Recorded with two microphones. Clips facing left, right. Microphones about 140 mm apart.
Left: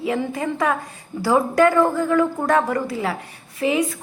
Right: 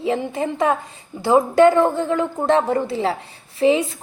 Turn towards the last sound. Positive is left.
turn(degrees=-30)  # may be behind; listen again after turning